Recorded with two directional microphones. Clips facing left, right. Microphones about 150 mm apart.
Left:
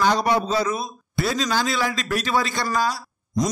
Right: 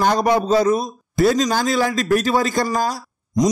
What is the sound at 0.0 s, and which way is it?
A man's voice, 45° right (ahead or behind).